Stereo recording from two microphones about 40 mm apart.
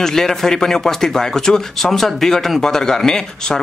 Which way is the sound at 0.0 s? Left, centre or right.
Centre.